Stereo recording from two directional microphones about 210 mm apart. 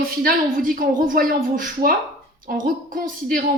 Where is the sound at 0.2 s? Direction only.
40° right (ahead or behind).